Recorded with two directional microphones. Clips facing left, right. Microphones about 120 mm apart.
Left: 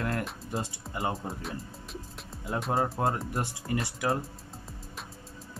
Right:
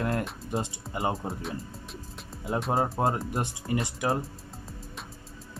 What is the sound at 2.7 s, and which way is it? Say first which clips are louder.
Speech: right 1 dB; 25° right (ahead or behind).